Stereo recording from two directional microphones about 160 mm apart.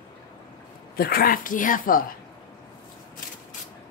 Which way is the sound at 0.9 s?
65° left (ahead or behind).